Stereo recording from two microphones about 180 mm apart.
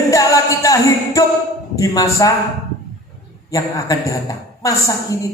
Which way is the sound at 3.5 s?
20° left (ahead or behind).